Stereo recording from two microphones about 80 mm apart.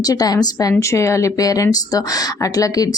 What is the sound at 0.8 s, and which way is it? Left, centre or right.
Speech, left.